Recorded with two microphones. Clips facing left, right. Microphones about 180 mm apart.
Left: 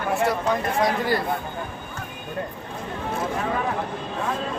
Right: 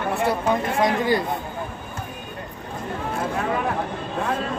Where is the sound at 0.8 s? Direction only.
20° right (ahead or behind).